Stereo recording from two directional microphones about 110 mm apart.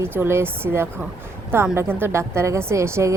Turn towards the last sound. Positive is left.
turn(degrees=-25)  # may be behind; listen again after turning